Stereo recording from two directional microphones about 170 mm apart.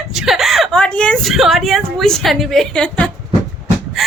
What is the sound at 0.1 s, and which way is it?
A woman's voice, centre (ahead or behind).